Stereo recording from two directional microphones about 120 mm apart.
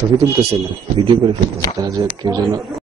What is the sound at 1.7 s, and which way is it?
Speech, 25° right (ahead or behind).